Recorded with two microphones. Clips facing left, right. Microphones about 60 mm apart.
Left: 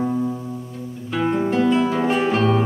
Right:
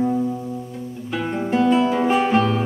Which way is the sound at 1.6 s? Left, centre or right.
Centre.